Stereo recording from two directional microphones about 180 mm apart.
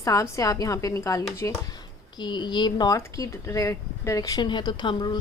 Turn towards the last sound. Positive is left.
turn(degrees=25)  # may be behind; listen again after turning